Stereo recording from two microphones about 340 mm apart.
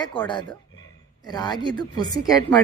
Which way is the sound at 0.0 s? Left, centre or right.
Centre.